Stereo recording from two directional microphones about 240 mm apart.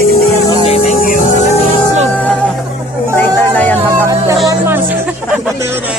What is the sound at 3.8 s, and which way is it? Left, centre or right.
Music, centre.